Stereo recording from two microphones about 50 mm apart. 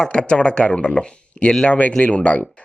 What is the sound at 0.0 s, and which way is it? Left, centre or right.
Speech, centre.